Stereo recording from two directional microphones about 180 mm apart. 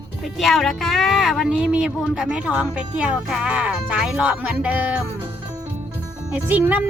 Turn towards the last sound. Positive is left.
turn(degrees=-10)  # may be behind; listen again after turning